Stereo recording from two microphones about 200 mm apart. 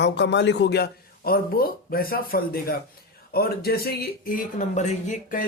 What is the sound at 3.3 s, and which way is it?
Speech, 50° left (ahead or behind).